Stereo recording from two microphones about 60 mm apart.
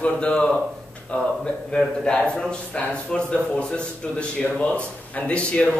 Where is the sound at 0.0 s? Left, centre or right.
Left.